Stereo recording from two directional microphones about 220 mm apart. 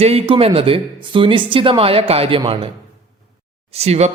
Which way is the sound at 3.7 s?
30° right (ahead or behind).